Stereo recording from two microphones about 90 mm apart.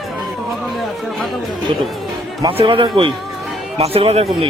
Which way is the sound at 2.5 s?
85° right.